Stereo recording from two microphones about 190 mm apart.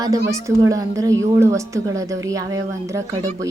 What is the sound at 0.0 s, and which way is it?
A woman's voice, 15° right (ahead or behind).